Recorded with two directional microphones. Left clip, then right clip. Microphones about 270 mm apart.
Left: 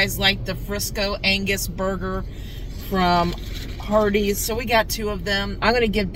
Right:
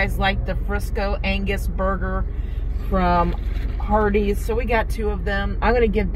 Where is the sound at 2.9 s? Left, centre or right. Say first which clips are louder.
Even; left.